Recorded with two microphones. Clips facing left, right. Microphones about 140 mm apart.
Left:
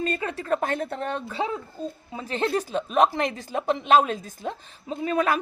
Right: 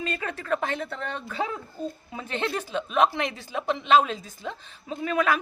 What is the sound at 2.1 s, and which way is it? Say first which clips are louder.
A woman's voice: left 5 dB; 35° left (ahead or behind).